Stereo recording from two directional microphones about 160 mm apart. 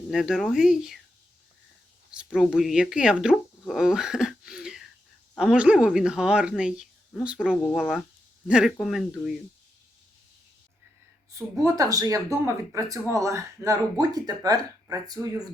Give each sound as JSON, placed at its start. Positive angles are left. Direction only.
{"t": 0.1, "sound": "speech", "side_deg": 0}
{"t": 2.1, "sound": "speech", "side_deg": -5}
{"t": 11.3, "sound": "speech", "side_deg": -20}